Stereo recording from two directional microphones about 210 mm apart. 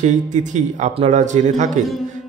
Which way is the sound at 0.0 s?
35° right (ahead or behind).